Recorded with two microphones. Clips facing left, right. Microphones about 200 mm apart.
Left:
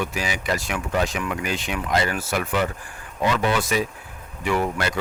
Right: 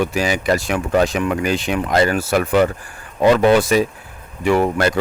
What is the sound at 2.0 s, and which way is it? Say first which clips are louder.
Speech: right 9 dB; 70° right (ahead or behind).